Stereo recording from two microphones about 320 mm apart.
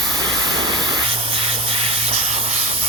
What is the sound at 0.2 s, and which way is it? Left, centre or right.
Steam, centre.